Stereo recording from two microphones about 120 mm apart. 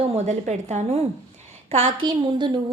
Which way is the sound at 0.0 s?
65° right (ahead or behind).